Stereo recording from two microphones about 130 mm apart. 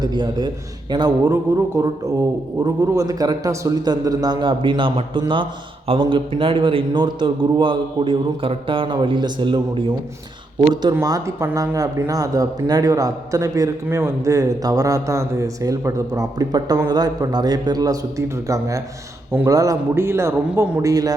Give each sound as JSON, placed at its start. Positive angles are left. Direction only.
{"t": 0.0, "sound": "a man's voice", "side_deg": -35}
{"t": 11.0, "sound": "a man's voice", "side_deg": -30}